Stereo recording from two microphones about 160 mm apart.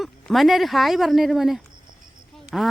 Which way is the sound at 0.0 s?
Centre (ahead or behind).